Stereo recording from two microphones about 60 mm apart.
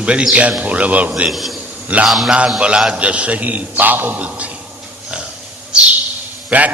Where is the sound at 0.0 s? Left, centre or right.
Centre.